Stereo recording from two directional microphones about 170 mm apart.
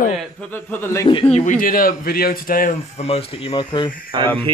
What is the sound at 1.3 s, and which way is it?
A man's voice, 45° left (ahead or behind).